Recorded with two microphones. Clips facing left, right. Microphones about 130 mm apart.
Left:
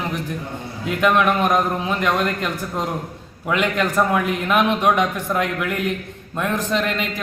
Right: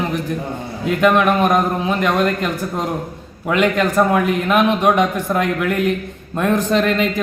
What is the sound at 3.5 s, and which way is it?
A man's voice, 25° right (ahead or behind).